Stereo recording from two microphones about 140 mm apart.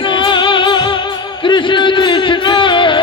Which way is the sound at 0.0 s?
35° left (ahead or behind).